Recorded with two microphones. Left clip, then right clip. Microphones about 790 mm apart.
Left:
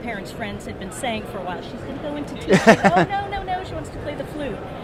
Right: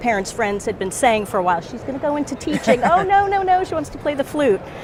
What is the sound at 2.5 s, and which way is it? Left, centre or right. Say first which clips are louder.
Speech: left 1 dB; left.